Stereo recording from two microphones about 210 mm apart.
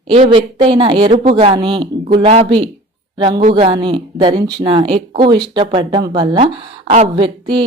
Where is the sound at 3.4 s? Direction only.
35° right (ahead or behind).